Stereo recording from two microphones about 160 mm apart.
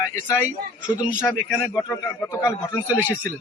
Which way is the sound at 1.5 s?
15° left (ahead or behind).